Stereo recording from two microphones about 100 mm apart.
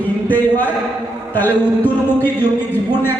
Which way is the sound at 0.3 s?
15° left (ahead or behind).